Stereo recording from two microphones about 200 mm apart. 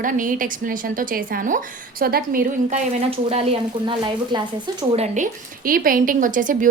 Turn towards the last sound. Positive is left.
turn(degrees=-40)  # may be behind; listen again after turning